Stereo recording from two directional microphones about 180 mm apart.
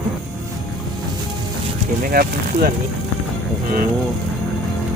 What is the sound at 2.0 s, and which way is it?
Speech, 55° right (ahead or behind).